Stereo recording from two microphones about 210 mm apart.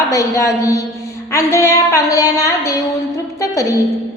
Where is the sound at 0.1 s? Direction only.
15° left (ahead or behind).